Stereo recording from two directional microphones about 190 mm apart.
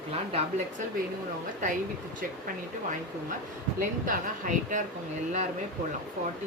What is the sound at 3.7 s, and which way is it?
Speech, 45° right (ahead or behind).